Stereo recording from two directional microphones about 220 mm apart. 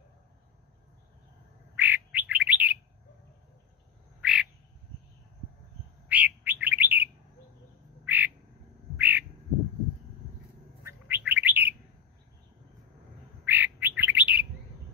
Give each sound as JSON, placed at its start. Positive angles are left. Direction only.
{"t": 1.8, "sound": "bird", "side_deg": -5}
{"t": 4.2, "sound": "frog", "side_deg": -5}
{"t": 6.0, "sound": "bird", "side_deg": -5}
{"t": 10.8, "sound": "bird", "side_deg": -10}
{"t": 13.5, "sound": "bird", "side_deg": -10}